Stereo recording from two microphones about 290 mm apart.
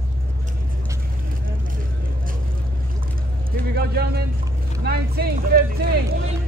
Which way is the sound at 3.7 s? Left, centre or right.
Right.